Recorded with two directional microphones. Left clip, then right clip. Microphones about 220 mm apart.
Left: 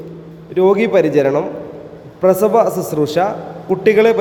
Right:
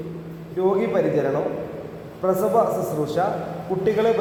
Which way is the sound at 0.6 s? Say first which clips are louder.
Left 9 dB; 40° left (ahead or behind).